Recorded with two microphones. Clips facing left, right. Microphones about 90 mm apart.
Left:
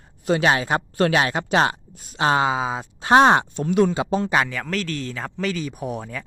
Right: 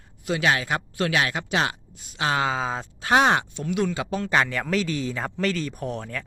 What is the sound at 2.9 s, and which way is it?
Speech, 30° left (ahead or behind).